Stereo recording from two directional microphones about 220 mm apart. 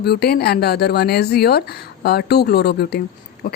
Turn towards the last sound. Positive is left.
turn(degrees=40)  # may be behind; listen again after turning